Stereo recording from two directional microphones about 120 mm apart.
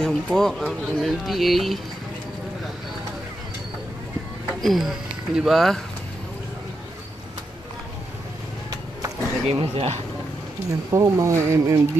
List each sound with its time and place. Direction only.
0.0 s speech: 5° left (ahead or behind)
4.6 s speech: centre (ahead or behind)
9.5 s speech: 55° right (ahead or behind)
10.7 s speech: 25° right (ahead or behind)